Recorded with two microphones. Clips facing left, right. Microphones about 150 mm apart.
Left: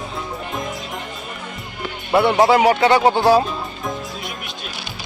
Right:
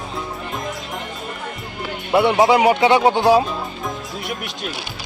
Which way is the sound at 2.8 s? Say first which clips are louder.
Even; 20° right (ahead or behind).